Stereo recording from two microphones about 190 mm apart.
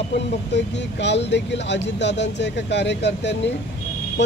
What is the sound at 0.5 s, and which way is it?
Speech, 65° left (ahead or behind).